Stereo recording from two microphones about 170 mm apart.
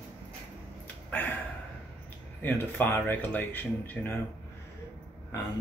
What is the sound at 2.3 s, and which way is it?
Speech, 10° left (ahead or behind).